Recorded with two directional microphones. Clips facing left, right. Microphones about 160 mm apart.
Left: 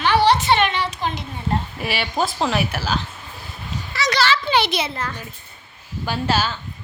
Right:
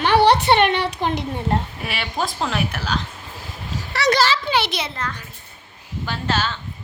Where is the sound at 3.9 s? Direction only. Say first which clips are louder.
Right 5 dB; 60° right (ahead or behind).